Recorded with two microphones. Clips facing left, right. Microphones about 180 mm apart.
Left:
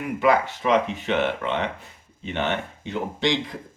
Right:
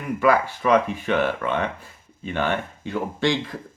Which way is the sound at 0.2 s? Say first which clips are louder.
Right 1 dB; 20° left (ahead or behind).